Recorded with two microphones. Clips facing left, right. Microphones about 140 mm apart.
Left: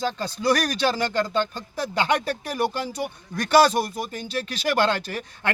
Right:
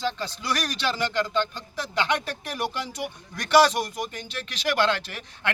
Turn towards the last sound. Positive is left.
turn(degrees=40)  # may be behind; listen again after turning